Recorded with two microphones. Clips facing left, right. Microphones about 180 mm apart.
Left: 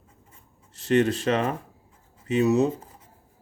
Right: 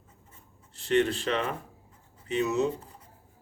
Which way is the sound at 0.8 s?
40° left (ahead or behind).